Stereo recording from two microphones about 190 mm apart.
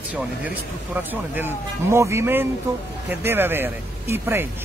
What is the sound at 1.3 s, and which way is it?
Speech, 10° right (ahead or behind).